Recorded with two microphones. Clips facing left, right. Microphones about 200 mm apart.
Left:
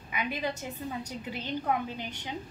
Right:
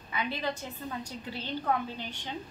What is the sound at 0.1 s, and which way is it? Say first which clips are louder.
A woman's voice: even; 15° left (ahead or behind).